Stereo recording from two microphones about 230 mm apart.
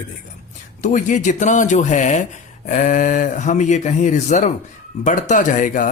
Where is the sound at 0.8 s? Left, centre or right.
Left.